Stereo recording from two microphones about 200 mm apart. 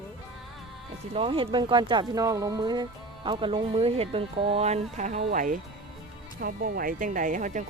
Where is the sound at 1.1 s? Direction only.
25° right (ahead or behind).